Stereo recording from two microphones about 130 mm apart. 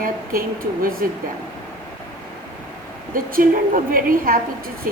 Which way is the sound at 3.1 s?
90° right.